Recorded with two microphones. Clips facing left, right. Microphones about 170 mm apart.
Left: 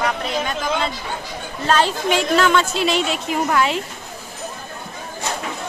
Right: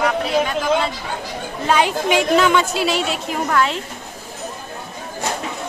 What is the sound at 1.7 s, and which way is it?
A woman's voice, 15° right (ahead or behind).